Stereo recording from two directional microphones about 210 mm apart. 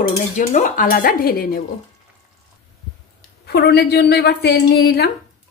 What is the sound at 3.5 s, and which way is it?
A woman's voice, 50° left (ahead or behind).